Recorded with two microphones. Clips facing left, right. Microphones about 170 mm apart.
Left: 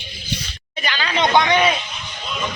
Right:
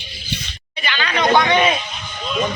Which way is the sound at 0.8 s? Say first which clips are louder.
Even; 40° left (ahead or behind).